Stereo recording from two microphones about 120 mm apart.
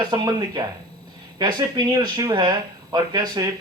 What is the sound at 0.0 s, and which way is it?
A man's voice, 35° right (ahead or behind).